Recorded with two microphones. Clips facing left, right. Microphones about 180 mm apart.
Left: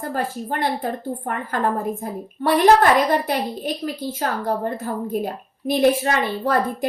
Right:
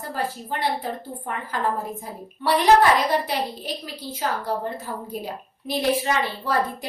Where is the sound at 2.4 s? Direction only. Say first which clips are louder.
Left 2 dB; 50° left (ahead or behind).